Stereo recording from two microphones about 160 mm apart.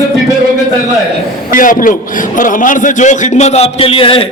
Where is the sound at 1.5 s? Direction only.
55° left (ahead or behind).